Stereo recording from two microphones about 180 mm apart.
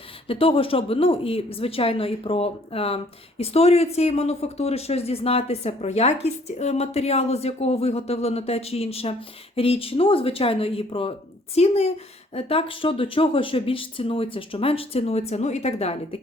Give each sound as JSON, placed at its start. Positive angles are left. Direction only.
{"t": 0.3, "sound": "speech", "side_deg": 30}